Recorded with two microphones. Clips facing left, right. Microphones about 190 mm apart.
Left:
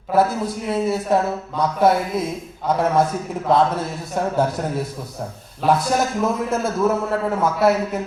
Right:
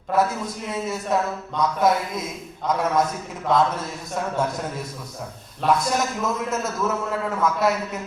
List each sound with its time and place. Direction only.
0.2 s a man's voice: 30° left (ahead or behind)
5.6 s a man's voice: 30° left (ahead or behind)